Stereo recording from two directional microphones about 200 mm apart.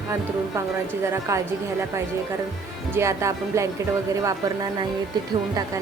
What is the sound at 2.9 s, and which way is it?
Speech, 15° right (ahead or behind).